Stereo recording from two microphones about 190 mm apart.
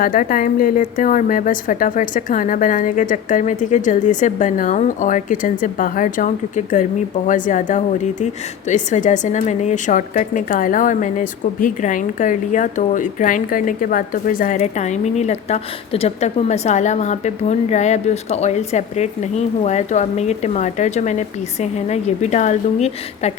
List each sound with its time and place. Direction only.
0.0 s a woman's voice: 50° left (ahead or behind)